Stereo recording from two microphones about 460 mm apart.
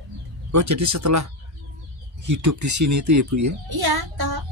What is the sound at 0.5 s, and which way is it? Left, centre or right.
Speech, right.